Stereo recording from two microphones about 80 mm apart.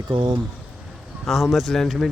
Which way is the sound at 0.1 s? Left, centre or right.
Right.